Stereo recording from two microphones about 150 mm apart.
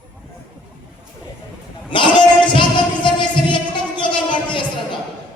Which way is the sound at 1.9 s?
35° left (ahead or behind).